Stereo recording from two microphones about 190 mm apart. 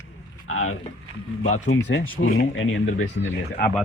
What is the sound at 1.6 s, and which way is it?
Speech, 70° left (ahead or behind).